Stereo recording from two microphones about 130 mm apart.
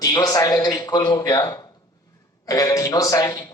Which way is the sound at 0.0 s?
30° left (ahead or behind).